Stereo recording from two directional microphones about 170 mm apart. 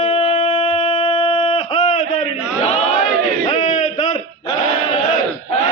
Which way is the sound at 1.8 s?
45° left (ahead or behind).